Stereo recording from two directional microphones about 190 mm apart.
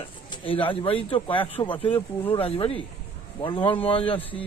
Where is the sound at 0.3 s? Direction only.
30° left (ahead or behind).